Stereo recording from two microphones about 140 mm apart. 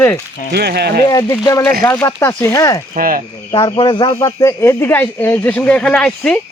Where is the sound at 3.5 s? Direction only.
35° left (ahead or behind); by 6.4 s 5° left (ahead or behind).